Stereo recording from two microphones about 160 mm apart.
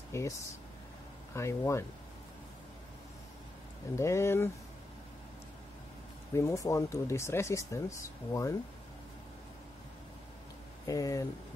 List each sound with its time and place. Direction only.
0.1 s speech: 20° left (ahead or behind)
1.3 s speech: 20° left (ahead or behind)
3.9 s speech: 15° left (ahead or behind)
6.3 s speech: 20° left (ahead or behind)
10.9 s speech: 20° left (ahead or behind)